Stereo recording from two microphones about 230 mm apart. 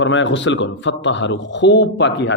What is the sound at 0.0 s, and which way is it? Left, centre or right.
A man's voice, left.